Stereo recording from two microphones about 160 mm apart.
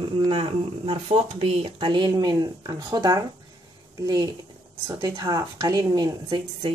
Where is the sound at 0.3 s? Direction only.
40° right (ahead or behind); by 6.0 s 20° right (ahead or behind).